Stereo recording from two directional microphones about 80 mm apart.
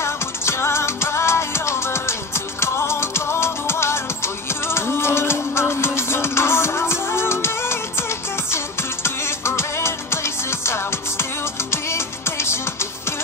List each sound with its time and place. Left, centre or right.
0.0 s music: left
9.0 s music: left